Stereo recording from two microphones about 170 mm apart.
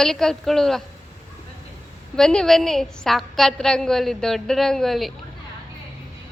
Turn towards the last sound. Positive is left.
turn(degrees=0)  # may be behind; listen again after turning